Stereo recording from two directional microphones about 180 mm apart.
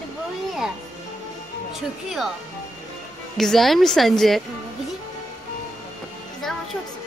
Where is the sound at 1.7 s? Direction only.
Centre (ahead or behind).